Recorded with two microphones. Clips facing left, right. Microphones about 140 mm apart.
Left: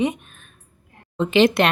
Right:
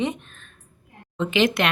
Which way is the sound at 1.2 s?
35° left (ahead or behind).